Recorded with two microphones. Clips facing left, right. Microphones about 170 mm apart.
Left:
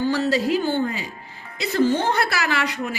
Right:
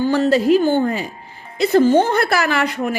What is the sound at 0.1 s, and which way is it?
A woman's voice, 50° right (ahead or behind).